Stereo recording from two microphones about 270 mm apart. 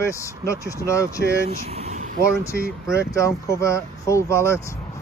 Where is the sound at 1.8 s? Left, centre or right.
Right.